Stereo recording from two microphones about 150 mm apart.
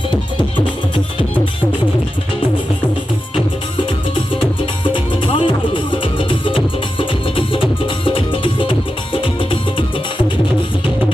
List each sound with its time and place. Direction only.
3.8 s music: 35° left (ahead or behind)